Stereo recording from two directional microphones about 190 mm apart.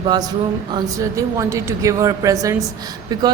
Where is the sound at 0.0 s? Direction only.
20° right (ahead or behind).